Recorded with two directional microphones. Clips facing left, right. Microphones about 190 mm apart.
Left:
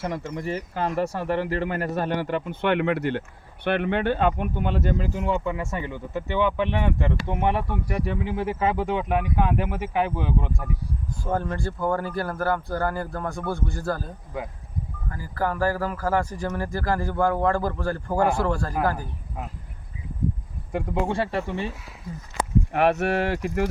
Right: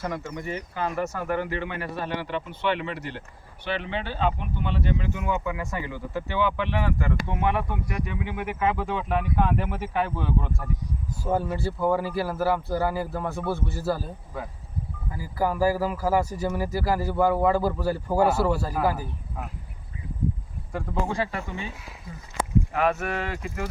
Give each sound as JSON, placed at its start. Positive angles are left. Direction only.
{"t": 0.0, "sound": "speech", "side_deg": 30}
{"t": 11.2, "sound": "a man's voice", "side_deg": -5}
{"t": 15.1, "sound": "speech", "side_deg": -10}
{"t": 20.7, "sound": "speech", "side_deg": 30}
{"t": 22.9, "sound": "speech", "side_deg": 70}